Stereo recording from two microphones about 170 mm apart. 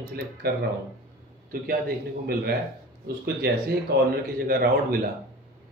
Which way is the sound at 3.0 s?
70° right (ahead or behind).